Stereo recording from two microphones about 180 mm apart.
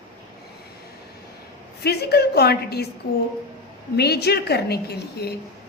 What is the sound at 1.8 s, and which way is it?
A woman's voice, 65° left (ahead or behind).